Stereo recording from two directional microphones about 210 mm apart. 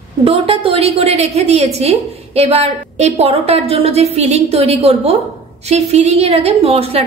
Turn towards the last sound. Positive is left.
turn(degrees=-30)  # may be behind; listen again after turning